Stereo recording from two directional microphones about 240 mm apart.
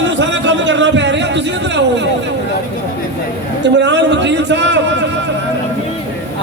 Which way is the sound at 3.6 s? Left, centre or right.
Right.